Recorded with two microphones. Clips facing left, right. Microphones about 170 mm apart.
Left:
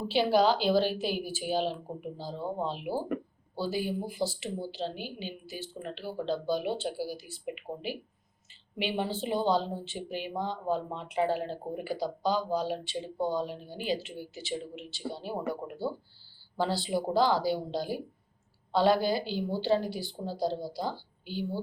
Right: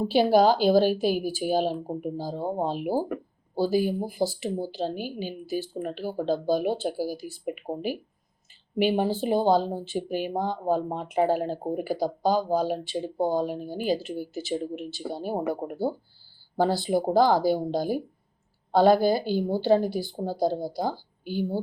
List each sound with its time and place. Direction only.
0.0 s speech: 45° right (ahead or behind)